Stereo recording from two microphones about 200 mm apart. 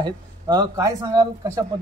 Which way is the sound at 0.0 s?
20° right (ahead or behind).